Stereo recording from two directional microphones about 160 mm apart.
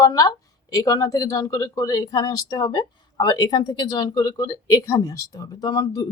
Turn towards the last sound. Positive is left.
turn(degrees=25)  # may be behind; listen again after turning